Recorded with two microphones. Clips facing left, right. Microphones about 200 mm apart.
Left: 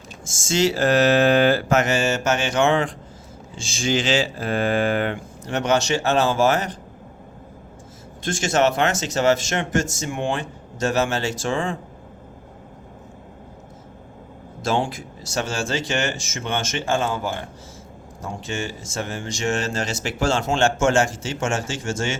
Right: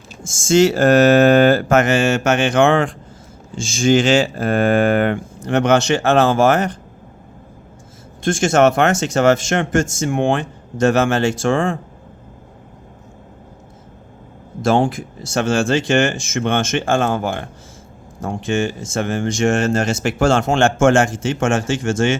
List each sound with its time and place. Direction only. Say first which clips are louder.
0.4 s speech: right 7 dB; 50° right (ahead or behind)
8.2 s speech: right 6 dB; 50° right (ahead or behind)
14.6 s speech: right 7 dB; 50° right (ahead or behind)